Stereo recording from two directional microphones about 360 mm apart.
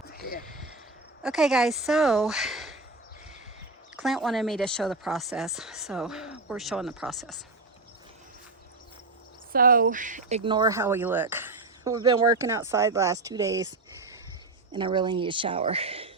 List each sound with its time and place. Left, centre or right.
0.1 s a sound: left
1.2 s speech: centre
4.0 s speech: centre
9.5 s speech: right